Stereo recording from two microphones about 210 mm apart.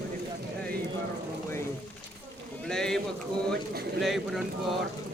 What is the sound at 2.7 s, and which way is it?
Speech, 5° left (ahead or behind).